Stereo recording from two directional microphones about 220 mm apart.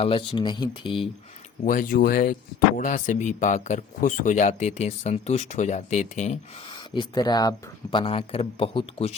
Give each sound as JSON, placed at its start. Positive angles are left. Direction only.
{"t": 0.0, "sound": "speech", "side_deg": 25}
{"t": 1.6, "sound": "speech", "side_deg": 40}
{"t": 6.9, "sound": "speech", "side_deg": 20}